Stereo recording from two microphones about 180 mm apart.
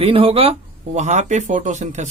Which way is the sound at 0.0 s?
30° right (ahead or behind).